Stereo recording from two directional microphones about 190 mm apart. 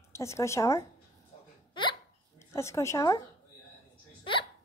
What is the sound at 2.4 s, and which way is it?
Speech, 15° left (ahead or behind).